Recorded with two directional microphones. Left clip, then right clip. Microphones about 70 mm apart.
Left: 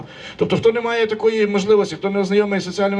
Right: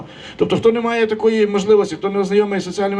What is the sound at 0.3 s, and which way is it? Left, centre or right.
A man's voice, right.